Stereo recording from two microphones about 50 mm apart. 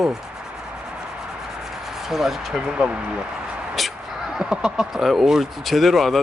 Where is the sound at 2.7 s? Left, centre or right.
Right.